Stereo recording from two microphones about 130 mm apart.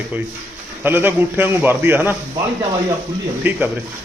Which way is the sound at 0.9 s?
15° right (ahead or behind).